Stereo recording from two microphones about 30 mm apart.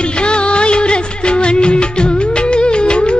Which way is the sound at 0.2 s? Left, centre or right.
Left.